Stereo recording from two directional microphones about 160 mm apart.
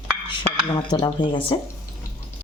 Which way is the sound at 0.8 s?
25° left (ahead or behind).